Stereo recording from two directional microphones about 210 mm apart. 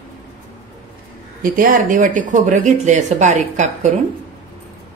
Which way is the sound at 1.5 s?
40° right (ahead or behind).